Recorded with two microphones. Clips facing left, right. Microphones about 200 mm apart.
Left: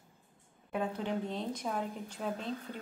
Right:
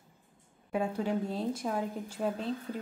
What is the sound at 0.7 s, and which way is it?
A woman's voice, 5° right (ahead or behind).